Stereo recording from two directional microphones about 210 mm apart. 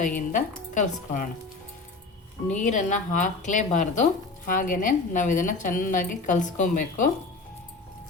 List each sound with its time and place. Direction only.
0.0 s speech: 40° left (ahead or behind)
2.5 s speech: 35° left (ahead or behind)